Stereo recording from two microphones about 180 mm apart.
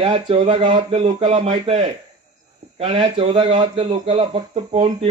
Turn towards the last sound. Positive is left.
turn(degrees=-35)  # may be behind; listen again after turning